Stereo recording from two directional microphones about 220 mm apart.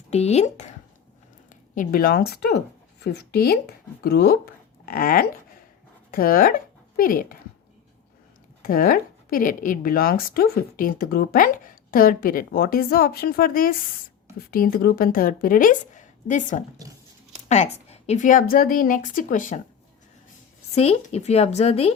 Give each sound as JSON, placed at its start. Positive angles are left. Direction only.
{"t": 0.1, "sound": "speech", "side_deg": 30}
{"t": 1.7, "sound": "speech", "side_deg": 40}
{"t": 8.6, "sound": "speech", "side_deg": 40}
{"t": 20.7, "sound": "speech", "side_deg": 30}